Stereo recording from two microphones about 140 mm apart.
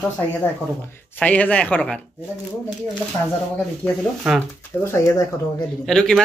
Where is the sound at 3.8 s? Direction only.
15° left (ahead or behind).